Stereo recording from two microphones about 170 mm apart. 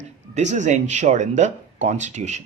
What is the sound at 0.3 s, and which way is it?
Speech, 45° right (ahead or behind).